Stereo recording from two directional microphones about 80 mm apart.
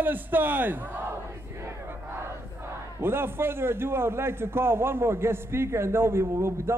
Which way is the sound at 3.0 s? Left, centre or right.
Right.